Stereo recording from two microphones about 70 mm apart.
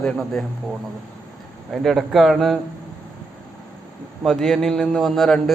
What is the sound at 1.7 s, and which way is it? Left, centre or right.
Speech, centre.